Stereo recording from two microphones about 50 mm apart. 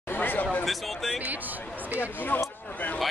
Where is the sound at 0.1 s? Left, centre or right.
Left.